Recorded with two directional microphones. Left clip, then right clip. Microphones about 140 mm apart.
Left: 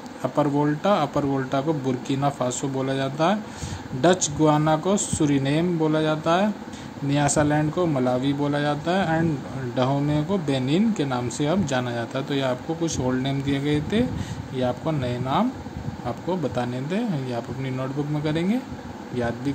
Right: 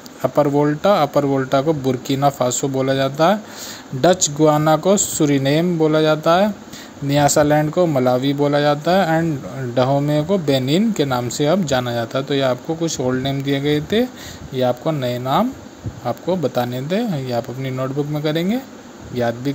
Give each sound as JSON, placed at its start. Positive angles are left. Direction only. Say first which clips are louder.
{"t": 0.2, "sound": "speech", "louder": "right 7 dB", "side_deg": -30}